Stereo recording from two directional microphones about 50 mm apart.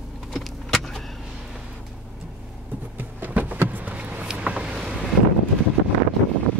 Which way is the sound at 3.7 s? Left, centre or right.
Right.